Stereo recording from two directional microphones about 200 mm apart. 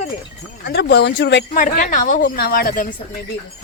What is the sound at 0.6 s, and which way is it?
Speech, 55° left (ahead or behind).